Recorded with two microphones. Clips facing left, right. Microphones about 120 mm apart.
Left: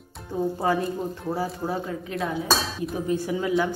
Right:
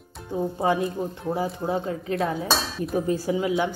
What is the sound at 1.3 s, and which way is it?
Speech, 20° right (ahead or behind).